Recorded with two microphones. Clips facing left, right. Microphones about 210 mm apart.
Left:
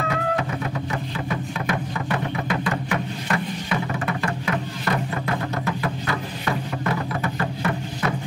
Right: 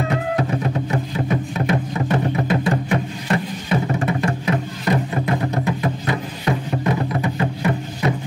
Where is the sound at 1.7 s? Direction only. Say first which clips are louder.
Right 5 dB; 25° right (ahead or behind).